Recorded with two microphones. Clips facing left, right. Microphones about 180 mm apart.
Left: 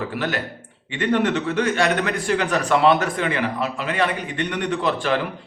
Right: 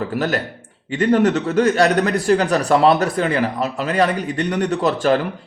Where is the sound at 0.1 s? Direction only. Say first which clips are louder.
Right 4 dB; 40° right (ahead or behind).